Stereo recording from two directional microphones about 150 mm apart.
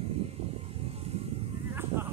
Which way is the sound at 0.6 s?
40° right (ahead or behind).